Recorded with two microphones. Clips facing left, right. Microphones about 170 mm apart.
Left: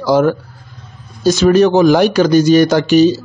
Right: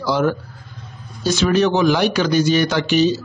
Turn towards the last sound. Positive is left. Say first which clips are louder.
# left 7 dB
turn(degrees=40)  # may be behind; listen again after turning